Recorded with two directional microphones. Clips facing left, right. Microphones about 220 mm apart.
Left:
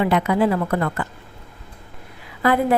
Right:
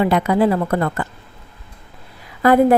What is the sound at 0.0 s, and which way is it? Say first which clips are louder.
Speech: right 3 dB; 35° right (ahead or behind).